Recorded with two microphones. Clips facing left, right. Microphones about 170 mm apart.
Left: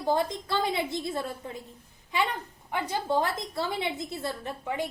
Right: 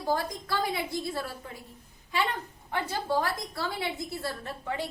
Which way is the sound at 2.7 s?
15° left (ahead or behind).